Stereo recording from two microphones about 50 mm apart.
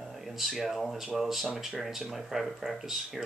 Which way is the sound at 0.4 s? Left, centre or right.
Centre.